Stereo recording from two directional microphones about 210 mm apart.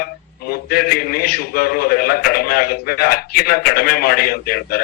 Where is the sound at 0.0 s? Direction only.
45° left (ahead or behind).